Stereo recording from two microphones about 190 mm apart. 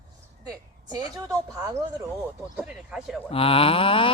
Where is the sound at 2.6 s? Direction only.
5° right (ahead or behind).